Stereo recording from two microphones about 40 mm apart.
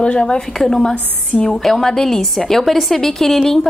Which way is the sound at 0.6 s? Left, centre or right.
Centre.